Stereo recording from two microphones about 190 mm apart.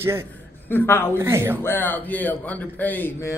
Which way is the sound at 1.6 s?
10° left (ahead or behind).